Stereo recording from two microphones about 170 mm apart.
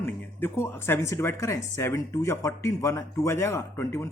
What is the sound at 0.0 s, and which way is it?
Speech, 10° left (ahead or behind).